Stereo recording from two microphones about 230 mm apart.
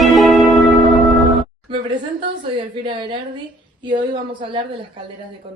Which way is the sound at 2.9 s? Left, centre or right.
Right.